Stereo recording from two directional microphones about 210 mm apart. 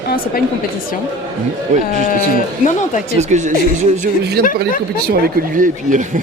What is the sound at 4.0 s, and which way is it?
Speech, 45° right (ahead or behind).